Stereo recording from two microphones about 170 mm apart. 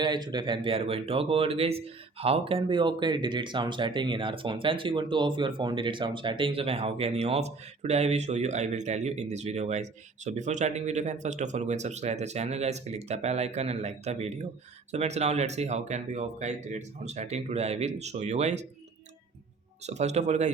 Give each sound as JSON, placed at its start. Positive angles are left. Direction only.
{"t": 0.0, "sound": "speech", "side_deg": -25}
{"t": 19.9, "sound": "speech", "side_deg": -40}